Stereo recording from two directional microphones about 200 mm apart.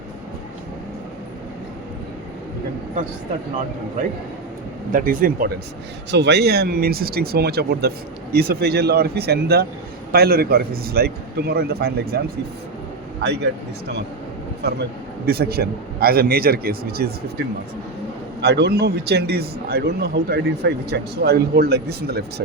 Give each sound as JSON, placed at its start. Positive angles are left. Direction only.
{"t": 4.9, "sound": "a man's voice", "side_deg": -45}
{"t": 6.1, "sound": "a man's voice", "side_deg": -60}
{"t": 13.2, "sound": "speech", "side_deg": -55}
{"t": 15.3, "sound": "a man's voice", "side_deg": -50}
{"t": 18.4, "sound": "a man's voice", "side_deg": -55}